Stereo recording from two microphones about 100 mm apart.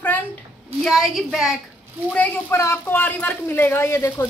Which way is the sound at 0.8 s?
Centre (ahead or behind).